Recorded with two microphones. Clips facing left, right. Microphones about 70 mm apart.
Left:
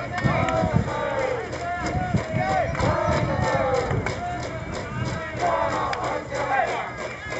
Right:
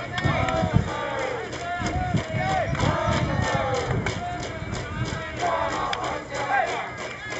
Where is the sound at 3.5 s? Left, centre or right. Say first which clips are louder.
Left 4 dB; left.